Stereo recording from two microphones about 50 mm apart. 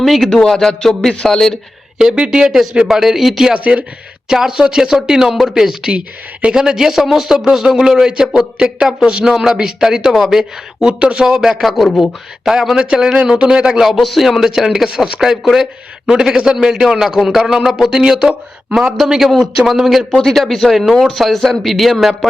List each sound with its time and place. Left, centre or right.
0.0 s speech: centre
2.1 s a man's voice: centre
3.5 s speech: right
4.3 s a man's voice: centre
11.6 s a man's voice: centre
13.9 s a man's voice: centre
20.1 s speech: centre